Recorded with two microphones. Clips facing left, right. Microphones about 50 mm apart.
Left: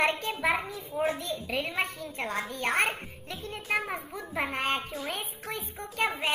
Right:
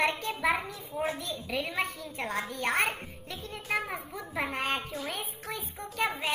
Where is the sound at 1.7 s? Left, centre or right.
Centre.